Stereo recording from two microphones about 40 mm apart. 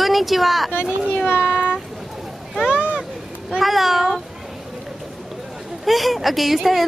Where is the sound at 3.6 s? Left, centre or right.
Centre.